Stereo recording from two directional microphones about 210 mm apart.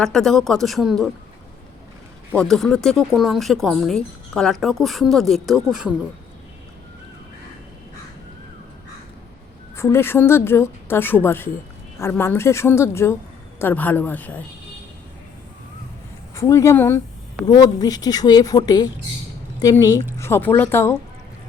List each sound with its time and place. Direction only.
0.0 s speech: centre (ahead or behind)
2.4 s speech: centre (ahead or behind)
9.7 s a woman's voice: 10° left (ahead or behind)
16.3 s a woman's voice: 15° left (ahead or behind)